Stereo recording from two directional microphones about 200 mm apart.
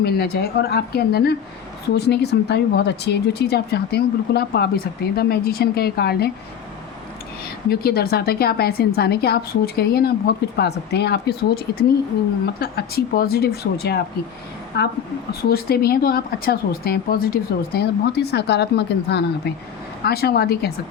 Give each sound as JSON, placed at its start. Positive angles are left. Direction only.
{"t": 0.0, "sound": "speech", "side_deg": 50}
{"t": 7.7, "sound": "a woman's voice", "side_deg": 50}